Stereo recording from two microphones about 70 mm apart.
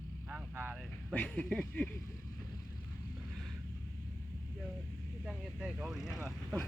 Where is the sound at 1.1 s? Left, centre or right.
Left.